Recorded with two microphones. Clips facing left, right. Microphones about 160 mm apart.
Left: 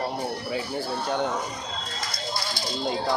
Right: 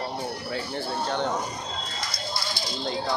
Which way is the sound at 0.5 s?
10° left (ahead or behind).